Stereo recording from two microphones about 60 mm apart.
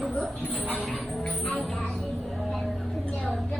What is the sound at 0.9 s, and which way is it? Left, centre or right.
Music, centre.